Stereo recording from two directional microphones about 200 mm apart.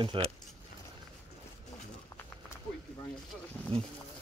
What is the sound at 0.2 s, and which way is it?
Speech, 25° right (ahead or behind).